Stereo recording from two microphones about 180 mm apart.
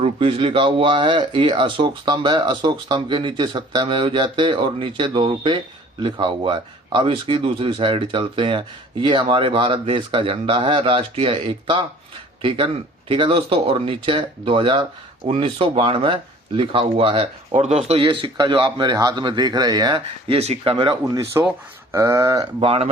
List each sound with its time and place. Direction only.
0.0 s speech: 30° right (ahead or behind)
21.4 s speech: 15° right (ahead or behind)